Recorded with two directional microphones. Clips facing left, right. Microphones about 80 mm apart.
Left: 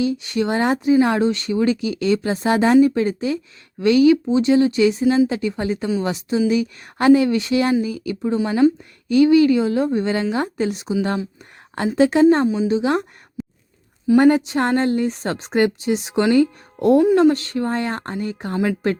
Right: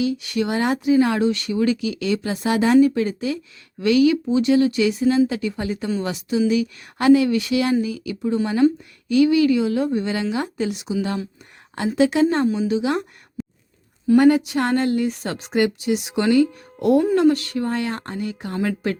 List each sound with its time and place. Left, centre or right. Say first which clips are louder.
0.0 s speech: left 2 dB; left
8.6 s speech: left 2 dB; centre
9.0 s speech: left 3 dB; left
13.4 s a sound: left 1 dB; centre
14.2 s speech: left 1 dB; left